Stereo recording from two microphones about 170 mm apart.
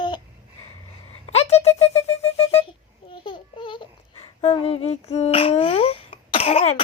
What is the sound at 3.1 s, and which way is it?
Babbling, 30° left (ahead or behind).